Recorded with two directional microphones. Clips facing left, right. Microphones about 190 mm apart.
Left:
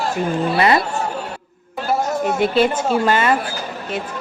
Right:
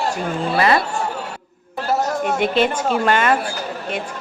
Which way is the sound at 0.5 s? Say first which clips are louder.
Even; 25° left (ahead or behind).